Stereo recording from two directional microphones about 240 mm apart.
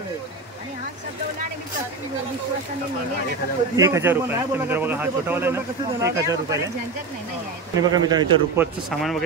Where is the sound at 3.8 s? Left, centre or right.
Centre.